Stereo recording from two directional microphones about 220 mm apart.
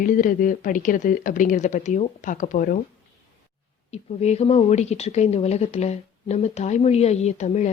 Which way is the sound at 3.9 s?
30° left (ahead or behind).